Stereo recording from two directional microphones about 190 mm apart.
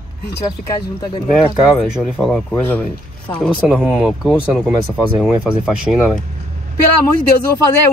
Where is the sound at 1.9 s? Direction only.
5° right (ahead or behind).